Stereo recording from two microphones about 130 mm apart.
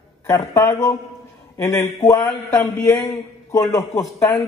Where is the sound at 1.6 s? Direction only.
25° left (ahead or behind).